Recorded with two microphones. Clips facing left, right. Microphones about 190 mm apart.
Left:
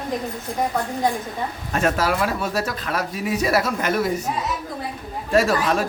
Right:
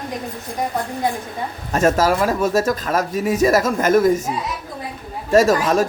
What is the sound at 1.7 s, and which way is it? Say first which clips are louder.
Speech: right 5 dB; 45° right (ahead or behind).